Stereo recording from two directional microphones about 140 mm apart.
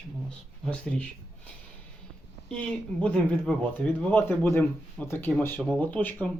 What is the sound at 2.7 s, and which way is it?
Speech, 5° left (ahead or behind).